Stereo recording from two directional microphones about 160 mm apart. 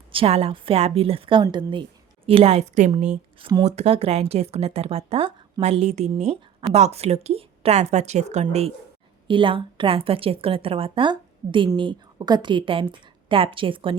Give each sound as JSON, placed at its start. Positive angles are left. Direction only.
{"t": 0.1, "sound": "a woman's voice", "side_deg": -35}
{"t": 9.2, "sound": "a woman's voice", "side_deg": -30}